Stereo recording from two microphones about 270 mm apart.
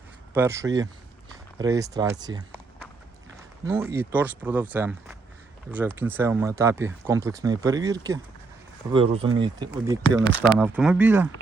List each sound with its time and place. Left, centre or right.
0.3 s speech: centre
3.7 s speech: centre